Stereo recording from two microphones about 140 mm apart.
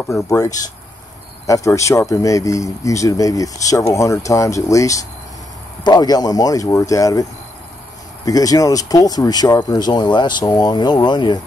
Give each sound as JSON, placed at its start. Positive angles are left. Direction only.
{"t": 0.3, "sound": "speech", "side_deg": 25}
{"t": 8.3, "sound": "speech", "side_deg": 25}